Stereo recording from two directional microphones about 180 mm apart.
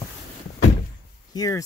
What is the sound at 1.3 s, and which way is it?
Speech, 20° left (ahead or behind).